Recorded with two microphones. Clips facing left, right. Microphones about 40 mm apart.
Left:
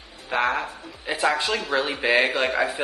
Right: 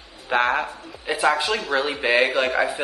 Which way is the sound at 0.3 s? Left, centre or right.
Centre.